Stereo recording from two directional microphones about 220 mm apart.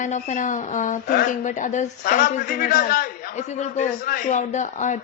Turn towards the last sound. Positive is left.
turn(degrees=35)  # may be behind; listen again after turning